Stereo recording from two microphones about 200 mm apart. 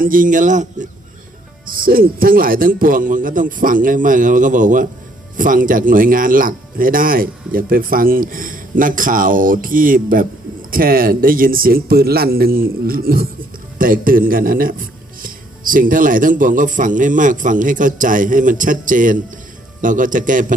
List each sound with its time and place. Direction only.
0.0 s speech: 45° right (ahead or behind)